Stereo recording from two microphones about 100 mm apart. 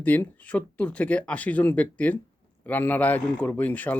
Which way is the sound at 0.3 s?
15° left (ahead or behind).